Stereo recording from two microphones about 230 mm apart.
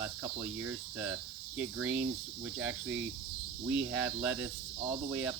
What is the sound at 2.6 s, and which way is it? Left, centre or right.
Cricket, centre.